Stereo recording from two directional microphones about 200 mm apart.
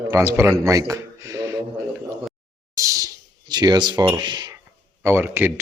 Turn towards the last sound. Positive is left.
turn(degrees=-10)  # may be behind; listen again after turning